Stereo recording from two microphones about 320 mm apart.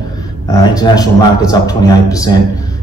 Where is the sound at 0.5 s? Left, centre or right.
Centre.